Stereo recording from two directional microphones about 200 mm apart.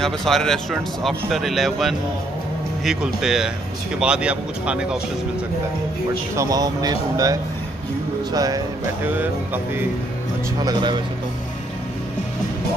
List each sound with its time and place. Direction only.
0.0 s speech: centre (ahead or behind)
6.3 s speech: 15° right (ahead or behind)
10.6 s speech: 20° right (ahead or behind)